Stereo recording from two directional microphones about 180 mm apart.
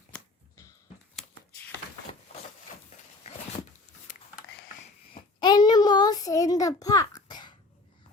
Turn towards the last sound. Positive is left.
turn(degrees=25)  # may be behind; listen again after turning